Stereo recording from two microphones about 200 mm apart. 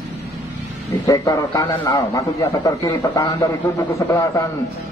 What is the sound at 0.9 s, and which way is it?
A man's voice, 15° left (ahead or behind).